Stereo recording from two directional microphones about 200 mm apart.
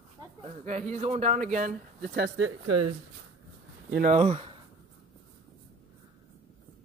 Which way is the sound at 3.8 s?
50° right (ahead or behind).